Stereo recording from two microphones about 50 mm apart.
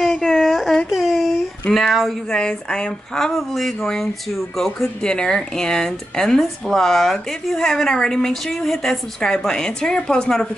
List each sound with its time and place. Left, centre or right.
0.0 s a sound: centre
0.8 s a sound: centre
1.7 s speech: centre
2.3 s speech: centre
3.2 s speech: centre
5.0 s speech: centre